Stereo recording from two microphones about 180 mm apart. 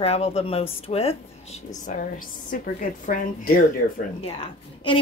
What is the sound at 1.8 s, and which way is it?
Speech, 45° left (ahead or behind).